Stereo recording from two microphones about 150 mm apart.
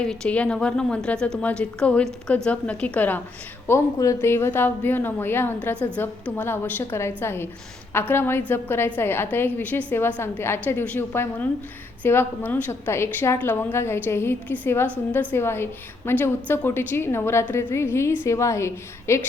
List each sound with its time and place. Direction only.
0.0 s a woman's voice: 5° left (ahead or behind)